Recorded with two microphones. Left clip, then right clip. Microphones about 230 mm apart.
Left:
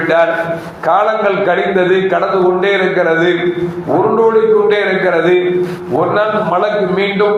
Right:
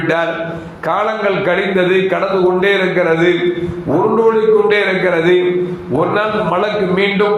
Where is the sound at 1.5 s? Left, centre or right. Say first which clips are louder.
Left 2 dB; right.